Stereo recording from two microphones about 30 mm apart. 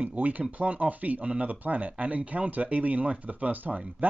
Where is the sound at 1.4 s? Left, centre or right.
Right.